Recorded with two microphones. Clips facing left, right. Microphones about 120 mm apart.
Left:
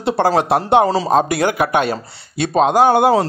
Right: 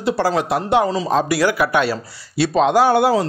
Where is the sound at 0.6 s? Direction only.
30° left (ahead or behind).